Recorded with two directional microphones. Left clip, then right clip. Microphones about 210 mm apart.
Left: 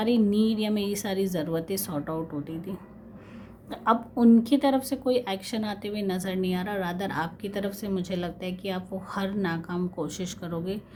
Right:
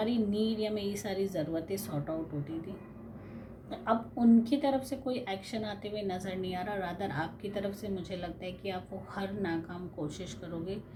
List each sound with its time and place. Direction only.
0.0 s speech: 45° left (ahead or behind)
3.7 s speech: 45° left (ahead or behind)